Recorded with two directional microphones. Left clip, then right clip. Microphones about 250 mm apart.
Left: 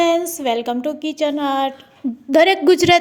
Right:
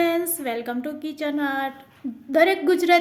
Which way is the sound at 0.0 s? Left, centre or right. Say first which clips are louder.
Left 6 dB; left.